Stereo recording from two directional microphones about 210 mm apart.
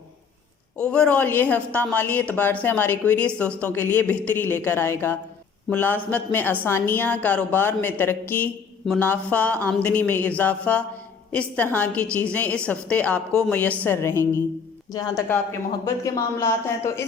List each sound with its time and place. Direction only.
0.9 s a woman's voice: 5° left (ahead or behind)